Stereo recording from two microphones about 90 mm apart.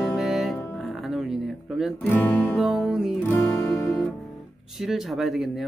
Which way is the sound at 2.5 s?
5° right (ahead or behind).